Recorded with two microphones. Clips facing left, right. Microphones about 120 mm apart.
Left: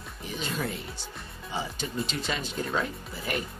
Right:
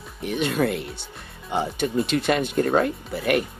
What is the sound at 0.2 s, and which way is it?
Speech, 65° right (ahead or behind).